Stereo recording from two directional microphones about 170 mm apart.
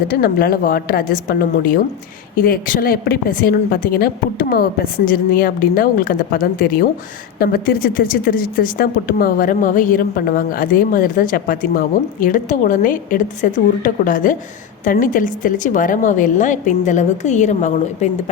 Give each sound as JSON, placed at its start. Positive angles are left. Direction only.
{"t": 0.1, "sound": "a woman's voice", "side_deg": 60}